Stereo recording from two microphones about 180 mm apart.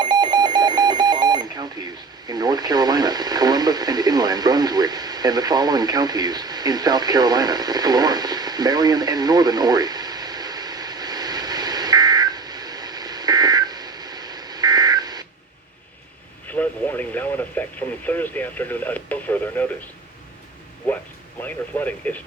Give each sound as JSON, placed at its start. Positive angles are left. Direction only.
{"t": 0.0, "sound": "alarm clock", "side_deg": -25}
{"t": 16.6, "sound": "radio", "side_deg": 10}
{"t": 18.0, "sound": "speech", "side_deg": 10}
{"t": 21.4, "sound": "speech", "side_deg": 10}